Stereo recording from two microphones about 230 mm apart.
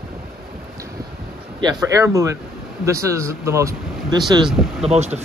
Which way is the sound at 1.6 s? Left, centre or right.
Centre.